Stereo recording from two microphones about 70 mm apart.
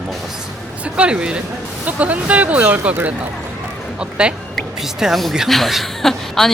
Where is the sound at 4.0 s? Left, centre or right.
Centre.